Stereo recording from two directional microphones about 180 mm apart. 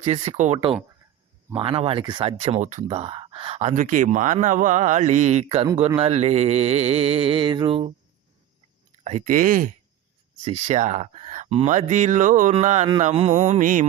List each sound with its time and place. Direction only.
0.0 s speech: 40° right (ahead or behind)
1.5 s speech: 30° right (ahead or behind)
9.0 s speech: 45° right (ahead or behind)